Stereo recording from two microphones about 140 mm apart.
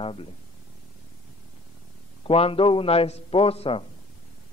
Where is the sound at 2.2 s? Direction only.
40° left (ahead or behind).